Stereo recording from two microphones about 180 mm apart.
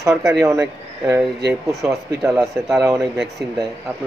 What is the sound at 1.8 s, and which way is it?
Speech, 15° right (ahead or behind).